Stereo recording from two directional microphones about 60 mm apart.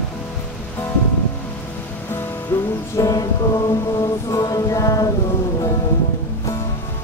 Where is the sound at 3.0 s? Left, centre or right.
Left.